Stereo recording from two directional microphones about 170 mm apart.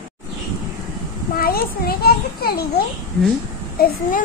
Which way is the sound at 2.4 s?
65° left (ahead or behind).